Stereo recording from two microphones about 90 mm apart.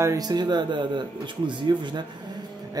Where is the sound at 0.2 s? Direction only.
50° right (ahead or behind).